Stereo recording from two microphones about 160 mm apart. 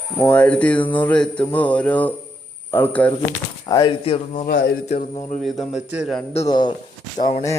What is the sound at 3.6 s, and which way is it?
Speech, 25° left (ahead or behind).